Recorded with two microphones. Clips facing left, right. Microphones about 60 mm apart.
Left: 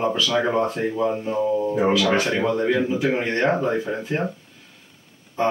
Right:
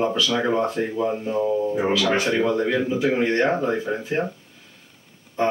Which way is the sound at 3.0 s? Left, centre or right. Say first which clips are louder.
Right 2 dB; left.